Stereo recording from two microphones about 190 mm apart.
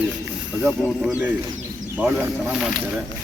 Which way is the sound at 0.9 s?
5° right (ahead or behind).